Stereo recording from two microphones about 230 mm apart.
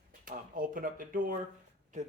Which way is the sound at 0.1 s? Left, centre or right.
Right.